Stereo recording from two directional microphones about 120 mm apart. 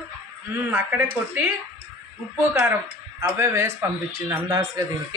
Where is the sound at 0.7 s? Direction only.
15° right (ahead or behind).